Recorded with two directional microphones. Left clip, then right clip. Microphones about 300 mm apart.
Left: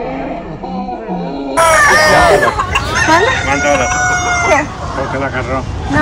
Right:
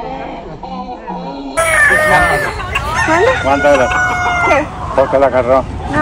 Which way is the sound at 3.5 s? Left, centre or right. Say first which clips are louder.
Right 2 dB; centre.